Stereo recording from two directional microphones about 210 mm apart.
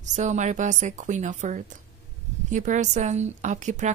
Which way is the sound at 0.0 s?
35° right (ahead or behind).